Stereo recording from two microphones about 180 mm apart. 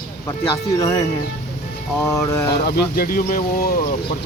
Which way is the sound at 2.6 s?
55° left (ahead or behind).